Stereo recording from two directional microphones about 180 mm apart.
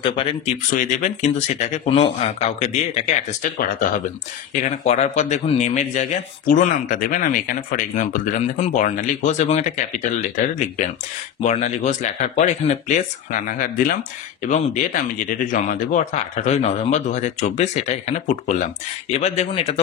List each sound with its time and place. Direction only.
0.0 s speech: 30° left (ahead or behind)
0.7 s a man's voice: 45° left (ahead or behind)